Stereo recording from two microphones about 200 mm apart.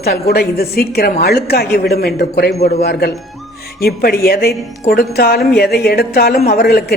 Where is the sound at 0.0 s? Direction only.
50° left (ahead or behind).